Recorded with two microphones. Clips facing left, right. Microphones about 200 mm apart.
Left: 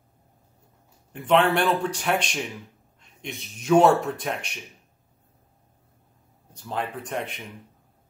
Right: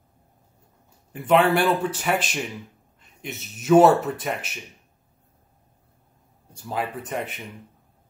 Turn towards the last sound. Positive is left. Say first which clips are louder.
# right 1 dB
turn(degrees=-5)  # may be behind; listen again after turning